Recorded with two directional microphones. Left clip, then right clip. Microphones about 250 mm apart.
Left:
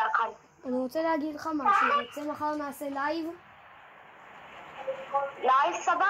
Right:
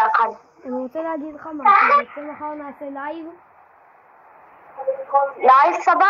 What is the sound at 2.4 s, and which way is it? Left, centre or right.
Speech, centre.